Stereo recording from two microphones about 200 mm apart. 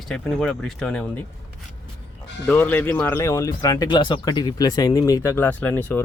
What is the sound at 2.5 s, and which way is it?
Speech, 10° left (ahead or behind).